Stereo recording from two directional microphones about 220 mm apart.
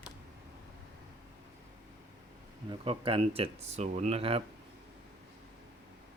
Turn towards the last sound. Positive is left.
turn(degrees=-25)  # may be behind; listen again after turning